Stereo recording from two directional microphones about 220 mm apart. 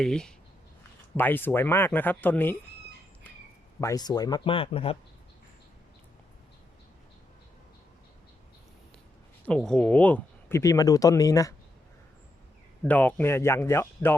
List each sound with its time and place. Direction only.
0.0 s speech: 5° left (ahead or behind)
3.8 s speech: 15° left (ahead or behind)
9.5 s speech: 5° left (ahead or behind)
12.8 s speech: 5° left (ahead or behind)